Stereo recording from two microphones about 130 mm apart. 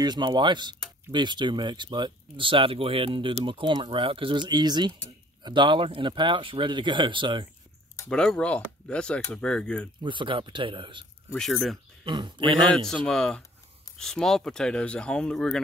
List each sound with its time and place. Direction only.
0.0 s speech: 35° right (ahead or behind)
8.1 s speech: 5° left (ahead or behind)
10.0 s speech: 40° right (ahead or behind)
11.3 s speech: centre (ahead or behind)
12.0 s speech: 35° right (ahead or behind)
12.7 s speech: 5° left (ahead or behind)